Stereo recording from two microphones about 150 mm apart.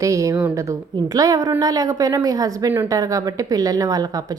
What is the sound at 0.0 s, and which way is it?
Speech, 20° right (ahead or behind).